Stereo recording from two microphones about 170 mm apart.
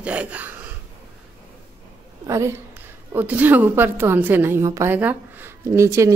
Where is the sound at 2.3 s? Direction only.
15° right (ahead or behind).